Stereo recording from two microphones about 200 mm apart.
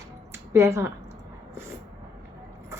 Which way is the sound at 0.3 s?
15° right (ahead or behind).